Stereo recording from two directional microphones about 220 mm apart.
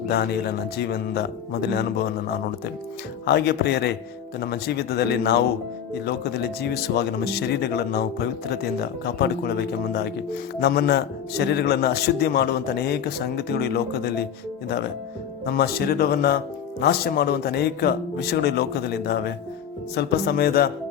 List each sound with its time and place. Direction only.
0.1 s speech: 45° left (ahead or behind)
3.2 s speech: 50° left (ahead or behind)
15.4 s speech: 45° left (ahead or behind)